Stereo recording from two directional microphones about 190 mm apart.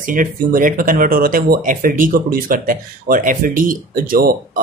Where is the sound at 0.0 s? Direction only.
45° right (ahead or behind).